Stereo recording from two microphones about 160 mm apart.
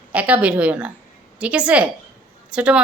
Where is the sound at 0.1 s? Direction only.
10° right (ahead or behind).